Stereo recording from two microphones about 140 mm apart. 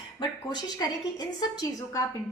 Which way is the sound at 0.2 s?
30° left (ahead or behind).